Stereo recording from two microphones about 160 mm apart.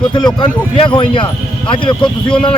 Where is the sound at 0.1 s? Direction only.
30° left (ahead or behind).